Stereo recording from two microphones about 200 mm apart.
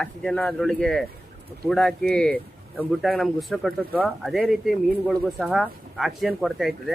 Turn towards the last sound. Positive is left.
turn(degrees=0)  # may be behind; listen again after turning